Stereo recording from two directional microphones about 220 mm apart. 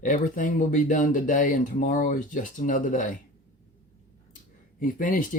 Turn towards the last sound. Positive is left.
turn(degrees=35)  # may be behind; listen again after turning